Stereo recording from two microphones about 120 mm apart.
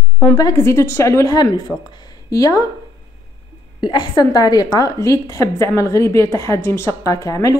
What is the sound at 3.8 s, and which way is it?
A woman's voice, 35° left (ahead or behind).